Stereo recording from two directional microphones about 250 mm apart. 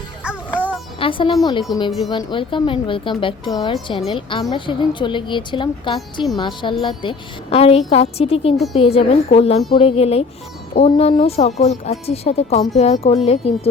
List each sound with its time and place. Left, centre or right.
0.3 s music: centre
0.9 s speech: left